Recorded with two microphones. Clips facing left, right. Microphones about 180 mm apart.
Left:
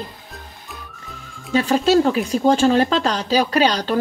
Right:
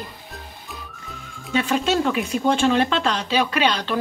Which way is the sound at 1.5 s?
35° left (ahead or behind).